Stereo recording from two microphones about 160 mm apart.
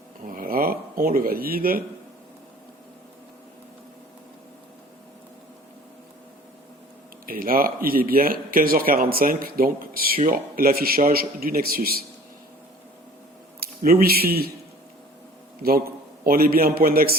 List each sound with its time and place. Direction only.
0.3 s speech: 65° right (ahead or behind)
7.3 s a man's voice: 65° right (ahead or behind)
13.6 s speech: 70° right (ahead or behind)
16.2 s a man's voice: 65° right (ahead or behind)